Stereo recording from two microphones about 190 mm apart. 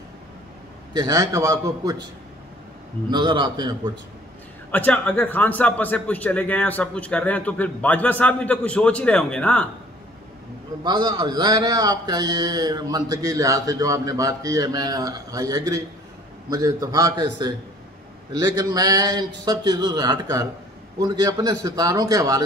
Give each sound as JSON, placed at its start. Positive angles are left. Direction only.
{"t": 0.9, "sound": "a man's voice", "side_deg": -20}
{"t": 3.1, "sound": "a man's voice", "side_deg": -25}
{"t": 4.6, "sound": "a man's voice", "side_deg": 10}
{"t": 10.8, "sound": "a man's voice", "side_deg": -20}